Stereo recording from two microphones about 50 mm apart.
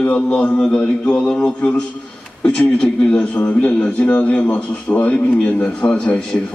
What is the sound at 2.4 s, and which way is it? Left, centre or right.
A man's voice, left.